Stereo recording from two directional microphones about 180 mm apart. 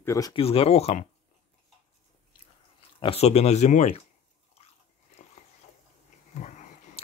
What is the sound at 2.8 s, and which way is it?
Speech, 30° left (ahead or behind).